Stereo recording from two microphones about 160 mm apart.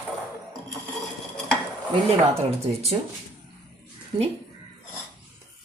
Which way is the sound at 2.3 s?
40° right (ahead or behind).